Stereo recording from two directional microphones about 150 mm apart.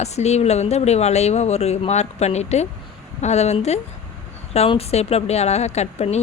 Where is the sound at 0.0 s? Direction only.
45° left (ahead or behind).